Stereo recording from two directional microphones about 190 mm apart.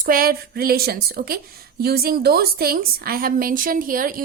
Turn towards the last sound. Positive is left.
turn(degrees=-45)  # may be behind; listen again after turning